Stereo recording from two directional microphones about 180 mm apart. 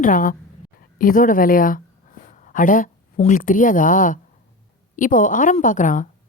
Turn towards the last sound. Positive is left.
turn(degrees=45)  # may be behind; listen again after turning